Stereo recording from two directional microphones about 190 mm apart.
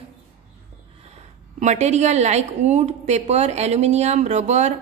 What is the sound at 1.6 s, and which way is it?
A woman's voice, 35° right (ahead or behind).